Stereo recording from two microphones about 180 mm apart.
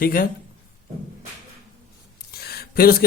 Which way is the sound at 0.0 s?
50° left (ahead or behind).